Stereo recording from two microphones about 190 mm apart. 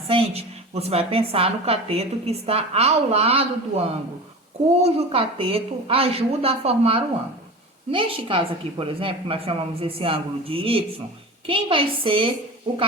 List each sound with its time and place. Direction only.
0.1 s a woman's voice: 30° right (ahead or behind)